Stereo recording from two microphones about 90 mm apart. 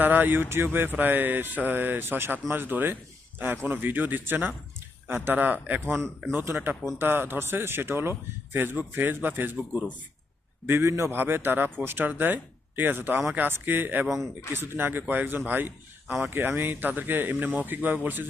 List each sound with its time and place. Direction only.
0.0 s a man's voice: 20° right (ahead or behind)
10.7 s a man's voice: 30° right (ahead or behind)